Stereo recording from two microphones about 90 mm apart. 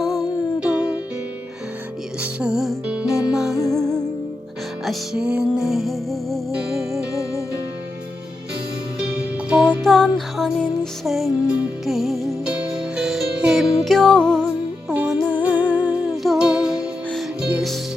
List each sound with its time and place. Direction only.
2.2 s music: 10° right (ahead or behind)
3.7 s music: 5° left (ahead or behind)
4.9 s music: 10° right (ahead or behind)
9.1 s music: 10° right (ahead or behind)
9.8 s music: centre (ahead or behind)
14.8 s music: 10° right (ahead or behind)
16.2 s music: centre (ahead or behind)